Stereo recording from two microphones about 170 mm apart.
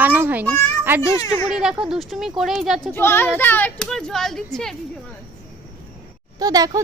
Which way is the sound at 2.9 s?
15° left (ahead or behind).